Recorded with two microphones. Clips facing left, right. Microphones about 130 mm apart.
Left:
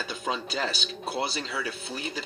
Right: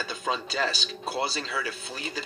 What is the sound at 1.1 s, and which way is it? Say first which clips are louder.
Speech: right 1 dB; 25° left (ahead or behind).